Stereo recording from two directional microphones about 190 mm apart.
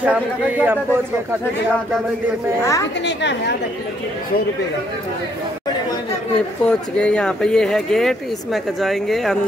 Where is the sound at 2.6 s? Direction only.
15° left (ahead or behind).